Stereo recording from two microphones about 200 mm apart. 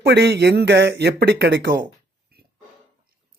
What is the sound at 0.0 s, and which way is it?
Speech, 55° right (ahead or behind).